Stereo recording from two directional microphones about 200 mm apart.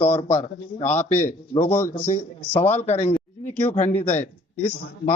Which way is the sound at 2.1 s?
40° left (ahead or behind).